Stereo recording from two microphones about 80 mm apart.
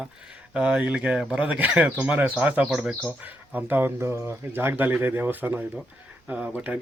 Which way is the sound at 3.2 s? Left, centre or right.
Right.